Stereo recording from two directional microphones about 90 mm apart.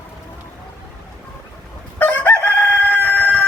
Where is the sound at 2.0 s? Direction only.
20° left (ahead or behind).